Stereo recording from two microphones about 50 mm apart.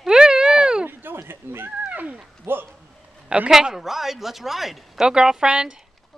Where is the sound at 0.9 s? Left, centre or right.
Right.